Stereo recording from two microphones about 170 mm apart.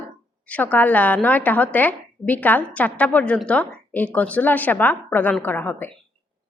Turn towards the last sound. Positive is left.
turn(degrees=10)  # may be behind; listen again after turning